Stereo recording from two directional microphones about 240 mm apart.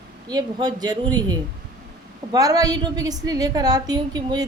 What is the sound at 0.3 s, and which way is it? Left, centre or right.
A woman's voice, centre.